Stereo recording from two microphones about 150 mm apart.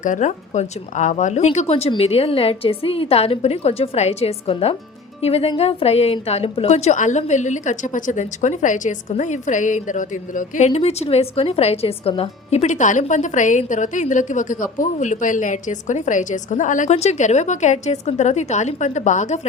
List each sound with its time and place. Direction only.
0.0 s speech: 55° left (ahead or behind)
10.7 s speech: 45° left (ahead or behind)